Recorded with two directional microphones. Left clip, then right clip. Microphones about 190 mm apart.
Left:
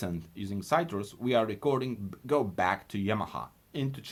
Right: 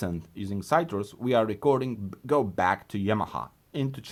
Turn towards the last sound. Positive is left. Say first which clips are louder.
# right 3 dB
turn(degrees=-45)  # may be behind; listen again after turning